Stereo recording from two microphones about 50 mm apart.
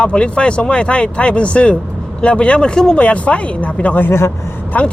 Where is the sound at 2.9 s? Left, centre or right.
Left.